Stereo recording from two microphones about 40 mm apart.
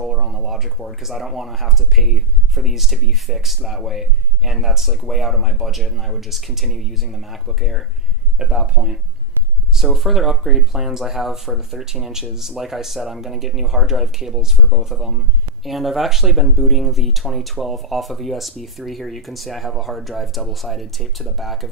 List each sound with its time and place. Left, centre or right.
0.0 s a sound: centre
0.5 s speech: centre
8.4 s speech: right
9.8 s speech: centre